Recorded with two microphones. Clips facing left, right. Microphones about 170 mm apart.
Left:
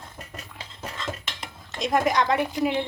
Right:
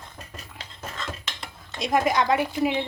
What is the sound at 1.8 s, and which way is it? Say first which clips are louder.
Speech: even; 5° right (ahead or behind).